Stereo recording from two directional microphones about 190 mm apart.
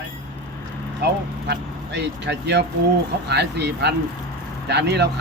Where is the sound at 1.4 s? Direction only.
65° right (ahead or behind).